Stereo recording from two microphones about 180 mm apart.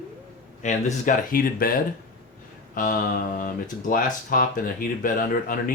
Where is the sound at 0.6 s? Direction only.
40° left (ahead or behind).